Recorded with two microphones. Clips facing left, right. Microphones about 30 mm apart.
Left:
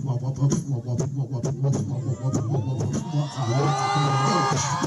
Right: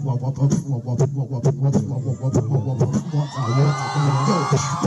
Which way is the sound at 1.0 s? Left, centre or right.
Right.